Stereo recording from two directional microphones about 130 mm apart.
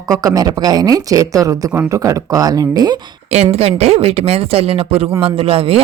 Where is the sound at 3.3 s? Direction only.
55° right (ahead or behind).